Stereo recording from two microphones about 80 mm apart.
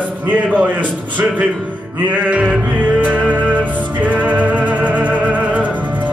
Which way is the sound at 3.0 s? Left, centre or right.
Centre.